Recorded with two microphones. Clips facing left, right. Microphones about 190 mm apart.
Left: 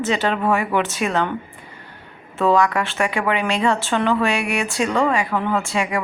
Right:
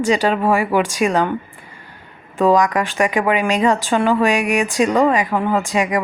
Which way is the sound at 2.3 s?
15° right (ahead or behind).